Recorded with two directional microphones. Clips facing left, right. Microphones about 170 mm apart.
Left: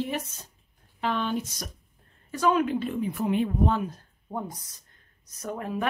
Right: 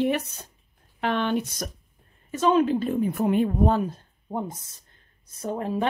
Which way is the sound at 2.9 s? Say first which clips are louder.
Right 4 dB; 45° right (ahead or behind).